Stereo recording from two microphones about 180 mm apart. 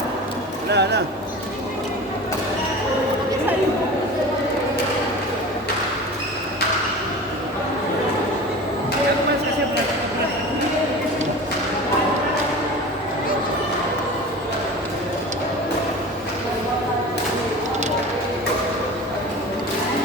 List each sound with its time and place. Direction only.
0.7 s speech: 70° right (ahead or behind)